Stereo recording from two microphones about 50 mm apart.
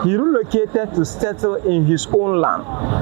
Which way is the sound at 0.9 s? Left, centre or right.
Right.